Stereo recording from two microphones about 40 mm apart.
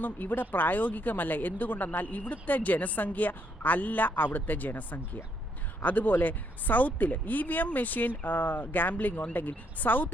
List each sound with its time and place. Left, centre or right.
0.0 s speech: left